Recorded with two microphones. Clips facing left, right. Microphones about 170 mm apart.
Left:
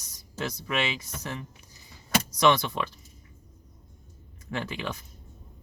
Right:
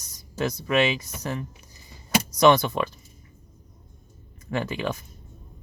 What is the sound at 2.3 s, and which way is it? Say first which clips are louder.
Speech: right 5 dB; 45° right (ahead or behind).